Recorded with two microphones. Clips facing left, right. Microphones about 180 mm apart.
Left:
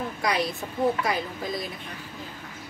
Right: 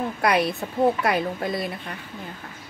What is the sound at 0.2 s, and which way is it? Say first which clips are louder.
Speech: right 5 dB; 60° right (ahead or behind).